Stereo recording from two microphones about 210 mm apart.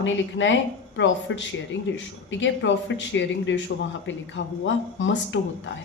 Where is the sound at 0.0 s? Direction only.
65° left (ahead or behind).